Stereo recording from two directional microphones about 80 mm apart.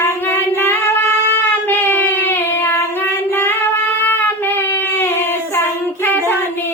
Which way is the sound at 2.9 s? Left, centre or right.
Left.